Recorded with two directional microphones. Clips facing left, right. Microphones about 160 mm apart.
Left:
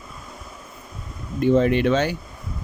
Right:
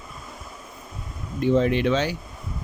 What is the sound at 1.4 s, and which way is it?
Speech, 50° left (ahead or behind).